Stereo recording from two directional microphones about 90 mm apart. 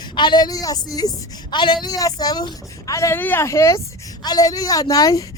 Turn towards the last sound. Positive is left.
turn(degrees=40)  # may be behind; listen again after turning